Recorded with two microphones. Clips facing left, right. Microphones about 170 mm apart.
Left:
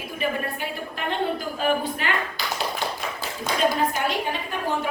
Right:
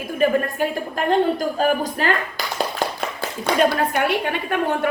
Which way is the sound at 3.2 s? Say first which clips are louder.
Right 7 dB; 65° right (ahead or behind).